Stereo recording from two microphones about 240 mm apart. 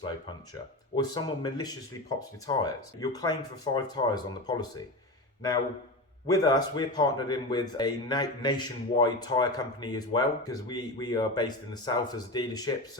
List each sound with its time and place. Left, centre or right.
0.9 s speech: centre
6.2 s speech: centre